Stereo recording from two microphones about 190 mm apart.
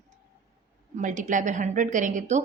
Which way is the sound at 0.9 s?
40° right (ahead or behind).